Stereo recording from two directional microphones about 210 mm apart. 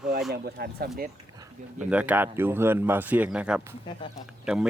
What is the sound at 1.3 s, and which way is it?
Speech, 5° right (ahead or behind).